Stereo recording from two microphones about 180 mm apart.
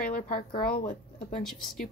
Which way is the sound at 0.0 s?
50° left (ahead or behind).